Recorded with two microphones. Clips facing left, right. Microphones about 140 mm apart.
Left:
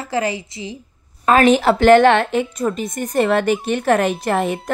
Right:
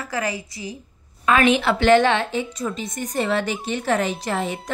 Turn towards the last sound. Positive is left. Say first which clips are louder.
# left 6 dB
turn(degrees=55)  # may be behind; listen again after turning